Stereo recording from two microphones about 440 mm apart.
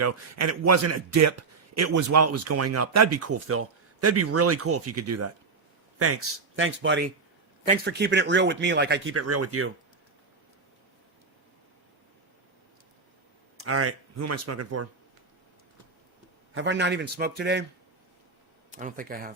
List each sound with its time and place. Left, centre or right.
0.0 s a man's voice: right
13.6 s speech: right
16.6 s speech: right
18.7 s speech: centre